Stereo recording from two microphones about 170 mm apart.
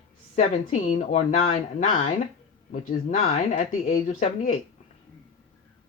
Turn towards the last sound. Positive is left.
turn(degrees=50)  # may be behind; listen again after turning